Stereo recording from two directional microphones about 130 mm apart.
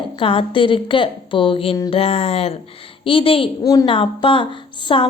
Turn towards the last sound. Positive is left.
turn(degrees=45)  # may be behind; listen again after turning